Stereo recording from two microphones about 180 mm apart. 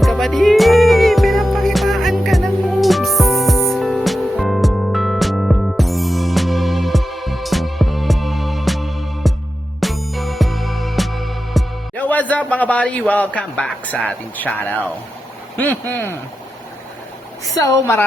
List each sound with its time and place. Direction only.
0.0 s music: centre (ahead or behind)
15.5 s speech: 10° left (ahead or behind)